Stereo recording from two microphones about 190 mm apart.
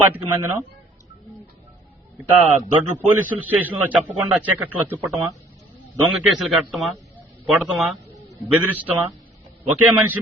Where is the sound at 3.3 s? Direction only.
10° right (ahead or behind).